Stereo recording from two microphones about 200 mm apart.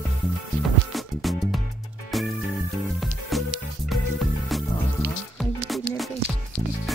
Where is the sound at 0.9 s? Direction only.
Centre (ahead or behind).